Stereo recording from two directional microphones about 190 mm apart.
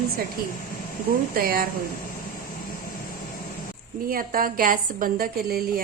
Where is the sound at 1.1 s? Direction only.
50° right (ahead or behind).